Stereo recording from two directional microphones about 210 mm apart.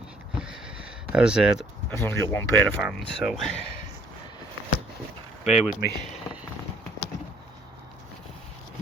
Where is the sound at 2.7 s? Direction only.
Centre (ahead or behind).